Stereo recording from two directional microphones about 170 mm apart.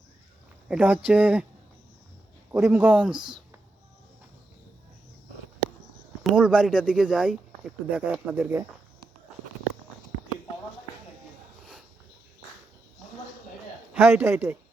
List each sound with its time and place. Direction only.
0.7 s speech: 10° right (ahead or behind)
2.5 s speech: 15° right (ahead or behind)
3.2 s speech: 25° right (ahead or behind)
6.3 s speech: 5° right (ahead or behind)
13.9 s speech: 10° right (ahead or behind)